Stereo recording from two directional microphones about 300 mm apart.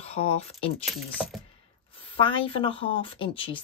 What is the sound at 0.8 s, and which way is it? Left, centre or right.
Speech, centre.